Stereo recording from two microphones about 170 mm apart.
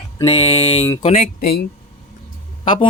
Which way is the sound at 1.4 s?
65° left (ahead or behind).